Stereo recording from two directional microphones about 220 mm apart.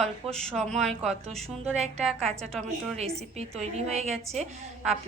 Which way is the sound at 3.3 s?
30° right (ahead or behind).